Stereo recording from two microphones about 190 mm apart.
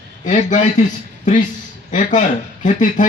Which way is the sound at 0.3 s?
40° left (ahead or behind).